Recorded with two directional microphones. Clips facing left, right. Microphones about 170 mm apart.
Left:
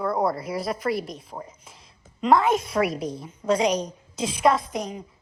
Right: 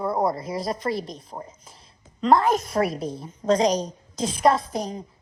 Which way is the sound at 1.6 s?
30° right (ahead or behind).